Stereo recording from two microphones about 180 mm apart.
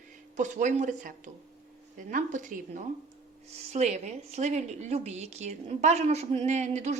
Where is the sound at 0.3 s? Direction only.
40° right (ahead or behind).